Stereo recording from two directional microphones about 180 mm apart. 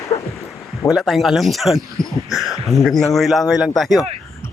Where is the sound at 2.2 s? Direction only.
Centre (ahead or behind).